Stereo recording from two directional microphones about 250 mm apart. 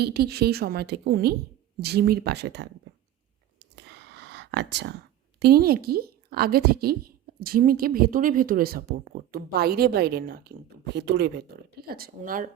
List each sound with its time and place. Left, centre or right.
0.0 s a woman's voice: right
3.6 s whispering: right
5.4 s a woman's voice: right